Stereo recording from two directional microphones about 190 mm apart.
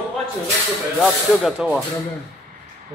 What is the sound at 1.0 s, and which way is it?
Speech, centre (ahead or behind).